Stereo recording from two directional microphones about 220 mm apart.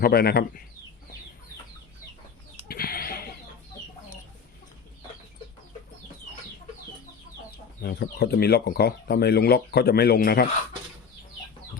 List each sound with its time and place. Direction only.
0.0 s speech: 45° left (ahead or behind)
2.6 s a sound: 45° left (ahead or behind)
7.8 s speech: 45° left (ahead or behind)